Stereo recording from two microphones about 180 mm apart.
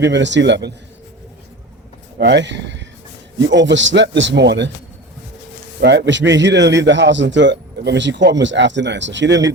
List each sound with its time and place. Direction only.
0.0 s a man's voice: 80° right
2.1 s speech: 75° right (ahead or behind)
5.8 s a man's voice: 70° right (ahead or behind)